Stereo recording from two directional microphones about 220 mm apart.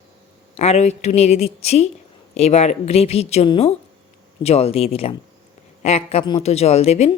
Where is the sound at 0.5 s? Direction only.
30° left (ahead or behind).